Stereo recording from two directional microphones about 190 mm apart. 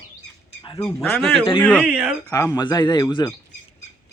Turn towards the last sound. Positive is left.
turn(degrees=20)  # may be behind; listen again after turning